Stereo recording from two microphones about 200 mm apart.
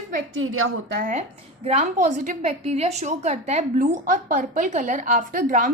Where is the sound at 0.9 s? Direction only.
45° right (ahead or behind).